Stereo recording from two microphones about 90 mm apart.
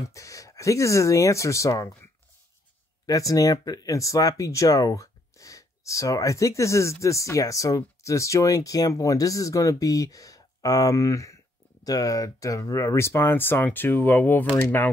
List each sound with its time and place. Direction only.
0.1 s speech: 35° left (ahead or behind)
3.1 s speech: 40° left (ahead or behind); by 14.5 s 20° left (ahead or behind)